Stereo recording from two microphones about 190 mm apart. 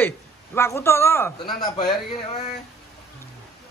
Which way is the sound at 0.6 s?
15° left (ahead or behind).